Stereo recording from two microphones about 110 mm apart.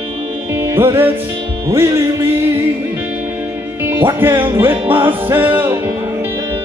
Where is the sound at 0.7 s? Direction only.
20° right (ahead or behind).